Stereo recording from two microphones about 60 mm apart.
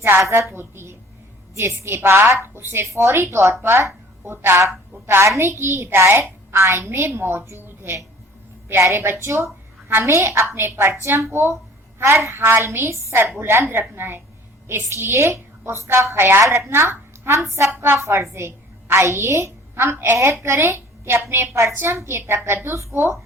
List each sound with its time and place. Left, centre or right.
0.2 s a woman's voice: right